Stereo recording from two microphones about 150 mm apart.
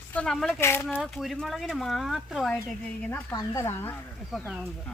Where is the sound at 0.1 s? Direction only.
5° left (ahead or behind).